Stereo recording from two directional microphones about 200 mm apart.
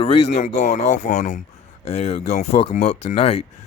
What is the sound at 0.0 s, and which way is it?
Speech, 30° left (ahead or behind).